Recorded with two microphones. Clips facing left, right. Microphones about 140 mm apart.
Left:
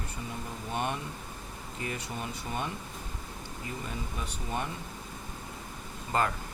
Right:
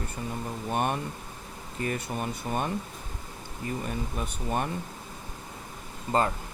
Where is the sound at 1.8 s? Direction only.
50° right (ahead or behind).